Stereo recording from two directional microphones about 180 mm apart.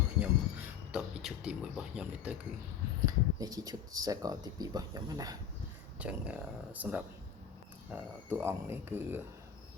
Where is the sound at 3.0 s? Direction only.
20° right (ahead or behind).